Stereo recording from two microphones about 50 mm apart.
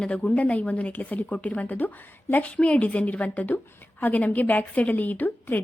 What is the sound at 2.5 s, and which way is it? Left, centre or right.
A woman's voice, left.